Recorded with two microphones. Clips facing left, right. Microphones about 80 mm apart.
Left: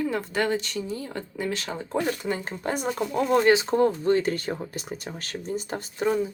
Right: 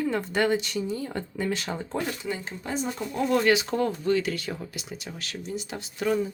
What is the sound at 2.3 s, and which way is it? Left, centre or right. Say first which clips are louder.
Speech: left 3 dB; left.